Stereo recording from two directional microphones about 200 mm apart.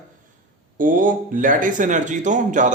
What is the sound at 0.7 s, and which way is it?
A man's voice, 40° right (ahead or behind).